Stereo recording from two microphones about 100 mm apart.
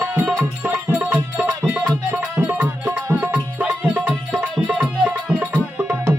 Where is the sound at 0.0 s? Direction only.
25° right (ahead or behind).